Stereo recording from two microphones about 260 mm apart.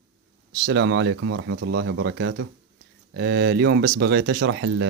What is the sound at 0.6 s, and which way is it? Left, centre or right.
Speech, right.